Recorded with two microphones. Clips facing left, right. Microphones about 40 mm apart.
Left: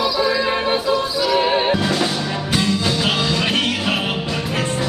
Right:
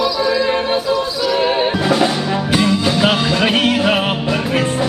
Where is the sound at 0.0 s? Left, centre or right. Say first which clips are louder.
Right 2 dB; centre.